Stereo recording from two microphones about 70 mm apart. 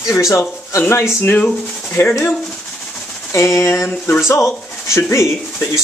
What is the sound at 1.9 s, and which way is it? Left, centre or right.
Speech, left.